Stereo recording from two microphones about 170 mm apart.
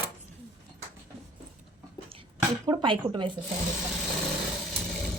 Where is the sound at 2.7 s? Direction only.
25° right (ahead or behind).